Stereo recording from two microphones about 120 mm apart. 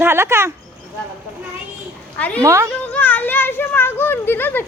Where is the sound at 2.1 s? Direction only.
10° left (ahead or behind).